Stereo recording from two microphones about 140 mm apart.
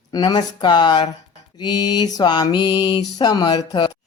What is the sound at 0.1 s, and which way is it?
Speech, 30° left (ahead or behind).